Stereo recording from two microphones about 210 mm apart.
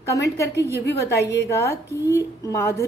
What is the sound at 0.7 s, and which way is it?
Speech, 50° left (ahead or behind).